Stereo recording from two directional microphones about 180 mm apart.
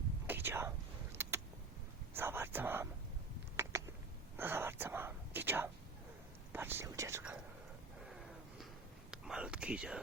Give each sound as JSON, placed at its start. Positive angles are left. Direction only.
{"t": 0.3, "sound": "whispering", "side_deg": -10}
{"t": 1.2, "sound": "vehicle", "side_deg": -15}
{"t": 2.1, "sound": "whispering", "side_deg": -10}
{"t": 3.6, "sound": "a sound", "side_deg": -15}
{"t": 4.4, "sound": "whispering", "side_deg": -10}
{"t": 8.0, "sound": "a sound", "side_deg": 0}
{"t": 9.0, "sound": "whispering", "side_deg": -5}